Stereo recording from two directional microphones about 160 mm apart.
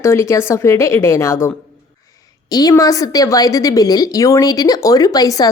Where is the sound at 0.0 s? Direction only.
15° left (ahead or behind).